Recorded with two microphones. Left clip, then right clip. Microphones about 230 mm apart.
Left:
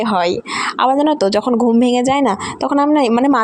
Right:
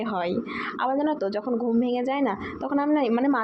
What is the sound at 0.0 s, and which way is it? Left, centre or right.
Speech, left.